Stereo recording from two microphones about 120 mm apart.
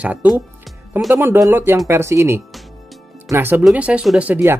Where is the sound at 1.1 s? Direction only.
20° right (ahead or behind).